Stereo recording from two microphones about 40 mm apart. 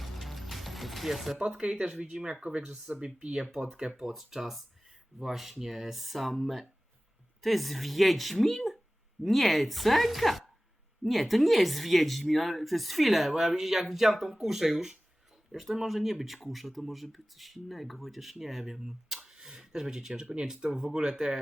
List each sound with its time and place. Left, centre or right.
0.0 s music: centre
1.6 s speech: centre
2.9 s speech: right
3.9 s speech: centre